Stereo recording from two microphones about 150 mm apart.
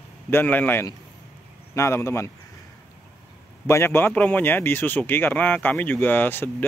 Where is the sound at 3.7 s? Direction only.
15° left (ahead or behind).